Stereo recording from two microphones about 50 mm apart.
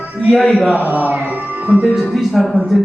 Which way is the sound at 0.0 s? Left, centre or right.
Right.